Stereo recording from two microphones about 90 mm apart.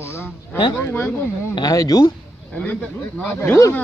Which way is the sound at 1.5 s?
45° left (ahead or behind).